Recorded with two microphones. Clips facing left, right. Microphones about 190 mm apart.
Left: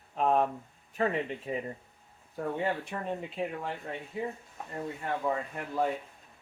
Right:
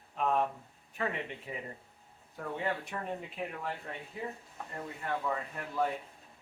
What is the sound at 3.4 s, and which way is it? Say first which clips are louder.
Speech: left 7 dB; 30° left (ahead or behind).